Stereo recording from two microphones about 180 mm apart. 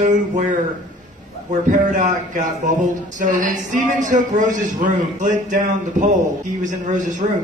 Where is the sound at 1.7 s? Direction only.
45° right (ahead or behind).